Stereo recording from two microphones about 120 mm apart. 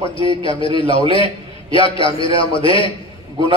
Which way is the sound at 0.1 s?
45° left (ahead or behind).